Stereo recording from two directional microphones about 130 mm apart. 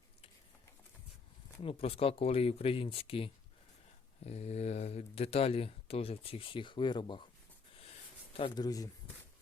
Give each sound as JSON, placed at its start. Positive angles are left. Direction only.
{"t": 1.6, "sound": "speech", "side_deg": 45}
{"t": 4.2, "sound": "speech", "side_deg": 55}
{"t": 8.3, "sound": "a sound", "side_deg": 45}
{"t": 8.5, "sound": "speech", "side_deg": 30}